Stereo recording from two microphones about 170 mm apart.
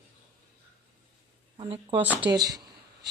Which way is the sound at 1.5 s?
35° right (ahead or behind).